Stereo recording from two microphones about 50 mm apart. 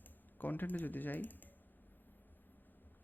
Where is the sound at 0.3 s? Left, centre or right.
Left.